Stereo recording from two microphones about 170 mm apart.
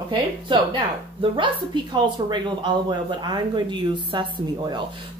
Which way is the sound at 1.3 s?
30° right (ahead or behind).